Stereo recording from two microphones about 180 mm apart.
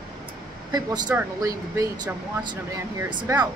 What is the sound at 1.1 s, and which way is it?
Speech, 10° right (ahead or behind).